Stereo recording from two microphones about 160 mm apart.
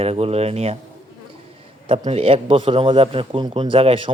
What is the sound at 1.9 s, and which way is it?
A man's voice, 40° right (ahead or behind).